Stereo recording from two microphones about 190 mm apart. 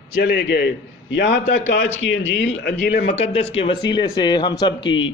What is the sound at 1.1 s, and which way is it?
Speech, 70° left (ahead or behind).